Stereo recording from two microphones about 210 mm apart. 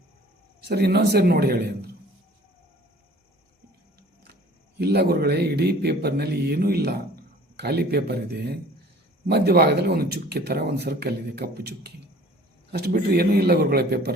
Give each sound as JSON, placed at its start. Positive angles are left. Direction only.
{"t": 0.6, "sound": "speech", "side_deg": -50}
{"t": 4.8, "sound": "speech", "side_deg": -50}